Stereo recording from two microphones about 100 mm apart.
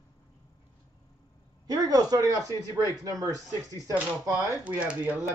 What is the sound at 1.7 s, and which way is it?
Speech, 40° right (ahead or behind).